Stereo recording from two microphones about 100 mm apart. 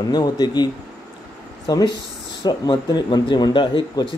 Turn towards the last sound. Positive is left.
turn(degrees=50)  # may be behind; listen again after turning